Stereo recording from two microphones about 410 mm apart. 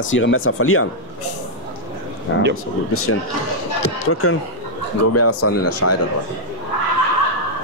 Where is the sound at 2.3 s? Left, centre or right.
Left.